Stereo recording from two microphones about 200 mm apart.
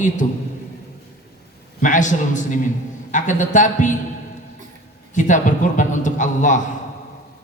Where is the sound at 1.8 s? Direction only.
40° left (ahead or behind).